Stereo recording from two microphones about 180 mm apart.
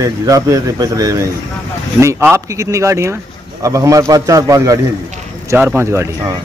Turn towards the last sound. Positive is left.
turn(degrees=-15)  # may be behind; listen again after turning